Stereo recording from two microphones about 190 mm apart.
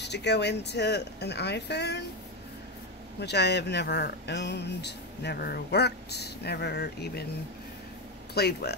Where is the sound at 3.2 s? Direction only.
60° left (ahead or behind).